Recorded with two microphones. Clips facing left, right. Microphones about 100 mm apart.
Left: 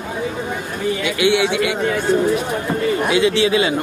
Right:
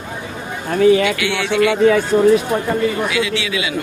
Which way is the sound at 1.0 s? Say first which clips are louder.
Left 3 dB; 20° left (ahead or behind).